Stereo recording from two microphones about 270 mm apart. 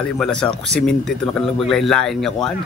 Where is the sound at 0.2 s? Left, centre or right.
Centre.